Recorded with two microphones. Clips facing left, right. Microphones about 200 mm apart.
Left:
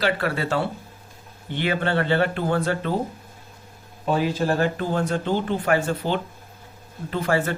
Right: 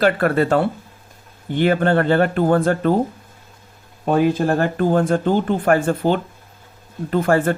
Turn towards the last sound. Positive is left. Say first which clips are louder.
# right 6 dB
turn(degrees=-50)  # may be behind; listen again after turning